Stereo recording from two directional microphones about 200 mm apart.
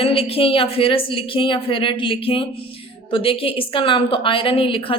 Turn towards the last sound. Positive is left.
turn(degrees=25)  # may be behind; listen again after turning